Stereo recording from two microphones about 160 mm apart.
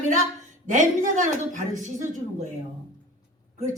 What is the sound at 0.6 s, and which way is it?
A man's voice, 50° right (ahead or behind).